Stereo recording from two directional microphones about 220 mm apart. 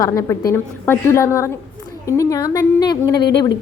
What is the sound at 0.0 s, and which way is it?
A woman's voice, 15° left (ahead or behind).